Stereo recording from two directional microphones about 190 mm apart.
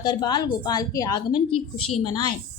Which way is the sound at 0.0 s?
20° left (ahead or behind).